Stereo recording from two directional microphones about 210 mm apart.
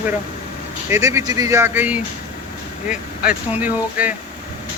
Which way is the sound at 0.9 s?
15° right (ahead or behind).